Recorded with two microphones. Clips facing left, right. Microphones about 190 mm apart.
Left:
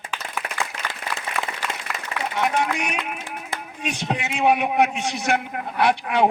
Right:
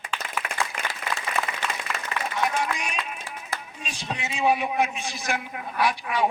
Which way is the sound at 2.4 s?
65° left (ahead or behind).